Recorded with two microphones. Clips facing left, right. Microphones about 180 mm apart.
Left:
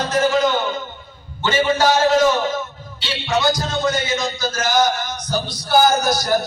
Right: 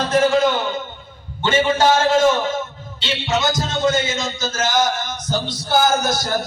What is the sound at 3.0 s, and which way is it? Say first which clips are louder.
Speech: left 1 dB; 25° right (ahead or behind).